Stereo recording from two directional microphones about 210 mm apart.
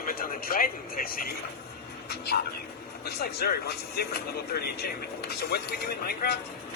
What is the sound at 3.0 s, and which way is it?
Speech, 50° left (ahead or behind).